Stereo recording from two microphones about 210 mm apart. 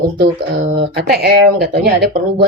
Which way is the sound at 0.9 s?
50° right (ahead or behind).